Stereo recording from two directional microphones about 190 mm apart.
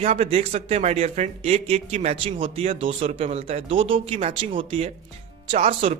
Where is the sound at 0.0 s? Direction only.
35° right (ahead or behind).